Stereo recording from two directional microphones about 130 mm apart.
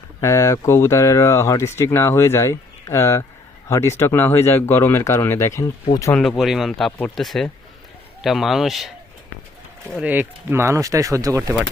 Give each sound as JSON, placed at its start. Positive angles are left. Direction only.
{"t": 0.2, "sound": "speech", "side_deg": 25}
{"t": 6.1, "sound": "speech", "side_deg": 0}
{"t": 10.0, "sound": "speech", "side_deg": -15}